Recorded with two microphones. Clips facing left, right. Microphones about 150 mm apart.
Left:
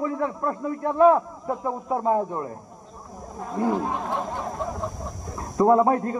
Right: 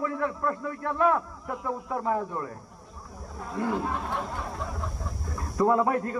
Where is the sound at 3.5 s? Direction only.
20° left (ahead or behind).